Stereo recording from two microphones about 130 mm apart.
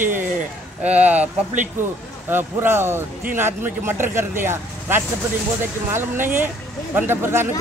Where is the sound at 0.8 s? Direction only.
10° right (ahead or behind).